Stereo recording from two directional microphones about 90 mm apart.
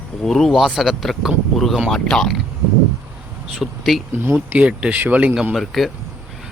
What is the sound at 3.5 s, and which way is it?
Speech, centre (ahead or behind).